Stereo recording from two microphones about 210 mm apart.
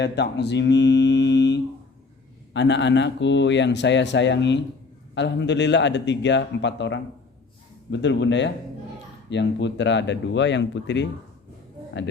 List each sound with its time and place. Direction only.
0.0 s speech: 55° left (ahead or behind)